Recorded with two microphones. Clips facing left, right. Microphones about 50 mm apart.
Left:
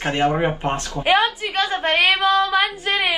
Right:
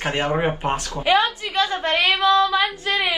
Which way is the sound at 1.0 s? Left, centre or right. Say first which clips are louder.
Left 1 dB; left.